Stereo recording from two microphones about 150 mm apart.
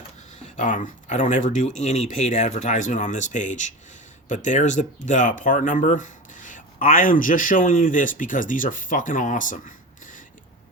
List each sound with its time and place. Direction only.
0.4 s speech: 55° left (ahead or behind)